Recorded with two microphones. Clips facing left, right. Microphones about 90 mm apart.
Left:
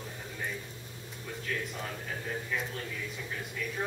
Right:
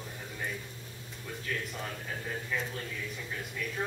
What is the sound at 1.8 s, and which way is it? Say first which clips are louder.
A man's voice: even; centre (ahead or behind).